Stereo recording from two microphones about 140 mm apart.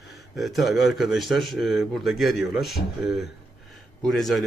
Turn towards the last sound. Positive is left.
turn(degrees=0)  # may be behind; listen again after turning